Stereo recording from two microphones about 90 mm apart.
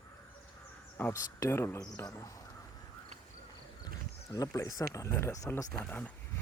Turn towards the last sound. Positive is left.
turn(degrees=15)  # may be behind; listen again after turning